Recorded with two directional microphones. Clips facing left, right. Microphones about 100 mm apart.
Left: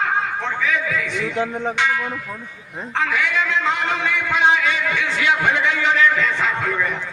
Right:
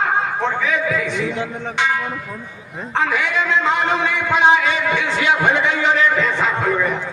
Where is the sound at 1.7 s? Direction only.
25° right (ahead or behind).